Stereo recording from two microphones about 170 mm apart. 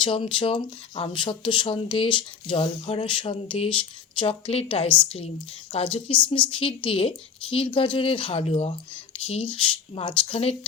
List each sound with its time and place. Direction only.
0.0 s speech: 30° left (ahead or behind)